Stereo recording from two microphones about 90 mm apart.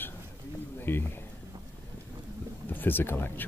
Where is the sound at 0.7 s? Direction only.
25° left (ahead or behind).